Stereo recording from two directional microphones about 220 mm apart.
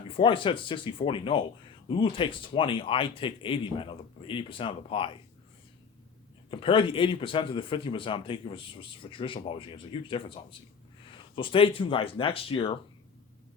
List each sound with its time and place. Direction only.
0.1 s speech: 25° left (ahead or behind)
6.5 s speech: 25° left (ahead or behind)